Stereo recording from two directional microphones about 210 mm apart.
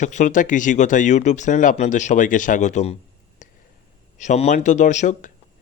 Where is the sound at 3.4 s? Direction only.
40° left (ahead or behind).